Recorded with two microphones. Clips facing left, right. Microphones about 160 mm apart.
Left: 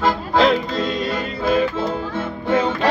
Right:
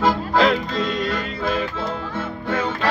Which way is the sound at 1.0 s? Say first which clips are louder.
Left 2 dB; 10° left (ahead or behind).